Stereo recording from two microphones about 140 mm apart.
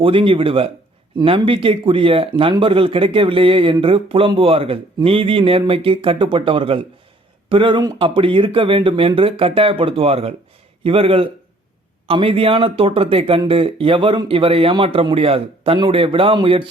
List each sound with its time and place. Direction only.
0.0 s speech: 40° right (ahead or behind)